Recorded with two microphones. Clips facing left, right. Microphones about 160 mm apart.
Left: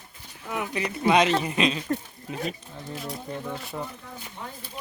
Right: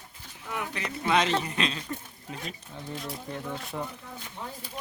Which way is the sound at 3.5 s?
Centre (ahead or behind).